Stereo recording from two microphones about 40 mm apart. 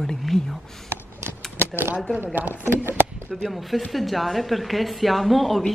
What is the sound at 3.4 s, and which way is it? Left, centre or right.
A woman's voice, centre.